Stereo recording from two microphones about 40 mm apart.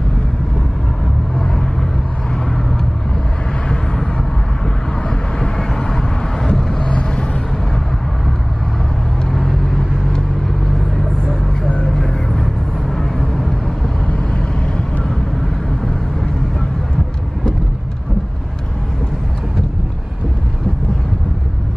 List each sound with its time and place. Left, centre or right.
3.6 s vehicle: centre
5.4 s vehicle: centre
6.8 s vehicle: left
9.3 s vehicle: centre
11.8 s vehicle: centre
14.0 s vehicle: left